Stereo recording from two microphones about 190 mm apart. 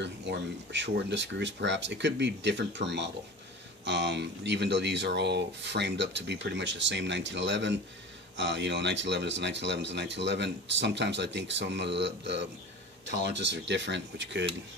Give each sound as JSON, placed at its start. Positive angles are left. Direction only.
{"t": 0.0, "sound": "speech", "side_deg": -65}